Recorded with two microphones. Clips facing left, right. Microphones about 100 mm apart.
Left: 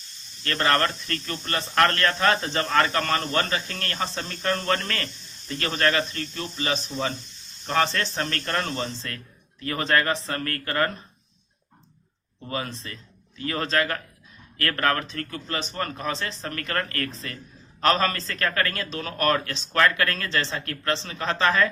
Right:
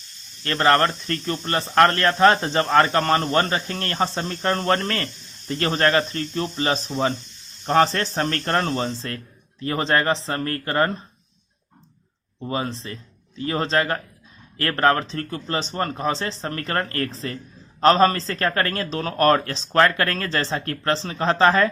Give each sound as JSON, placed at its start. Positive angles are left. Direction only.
{"t": 0.4, "sound": "speech", "side_deg": -30}
{"t": 12.5, "sound": "a man's voice", "side_deg": -30}